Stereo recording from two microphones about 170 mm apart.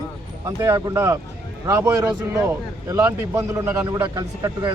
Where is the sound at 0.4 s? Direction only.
20° right (ahead or behind).